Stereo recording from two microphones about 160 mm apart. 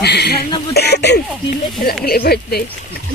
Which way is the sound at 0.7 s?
90° left.